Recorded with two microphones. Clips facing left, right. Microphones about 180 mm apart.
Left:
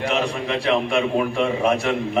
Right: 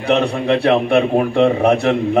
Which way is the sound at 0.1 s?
65° right (ahead or behind).